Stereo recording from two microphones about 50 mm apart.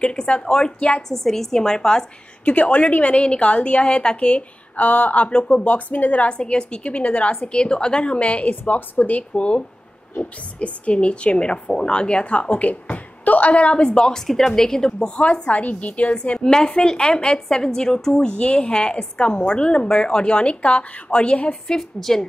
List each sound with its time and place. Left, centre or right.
0.0 s a woman's voice: left
1.0 s a woman's voice: centre
2.4 s a woman's voice: left
9.3 s a woman's voice: left
12.9 s a sound: left
13.5 s a woman's voice: left
15.0 s a woman's voice: left
16.3 s a woman's voice: centre
21.6 s a woman's voice: centre